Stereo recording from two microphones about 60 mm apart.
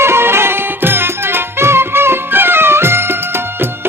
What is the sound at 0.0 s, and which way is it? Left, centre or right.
Music, right.